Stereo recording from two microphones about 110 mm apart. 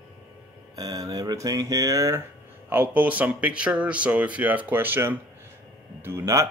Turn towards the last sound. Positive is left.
turn(degrees=-25)  # may be behind; listen again after turning